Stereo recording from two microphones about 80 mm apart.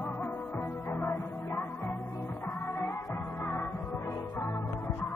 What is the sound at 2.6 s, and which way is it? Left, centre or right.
Music, left.